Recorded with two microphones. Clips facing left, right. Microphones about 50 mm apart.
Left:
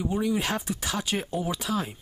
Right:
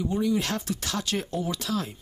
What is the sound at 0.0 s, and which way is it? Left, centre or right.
Speech, centre.